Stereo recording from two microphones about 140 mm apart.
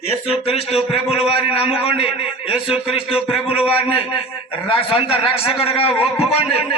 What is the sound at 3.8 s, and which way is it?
A man's voice, 45° left (ahead or behind).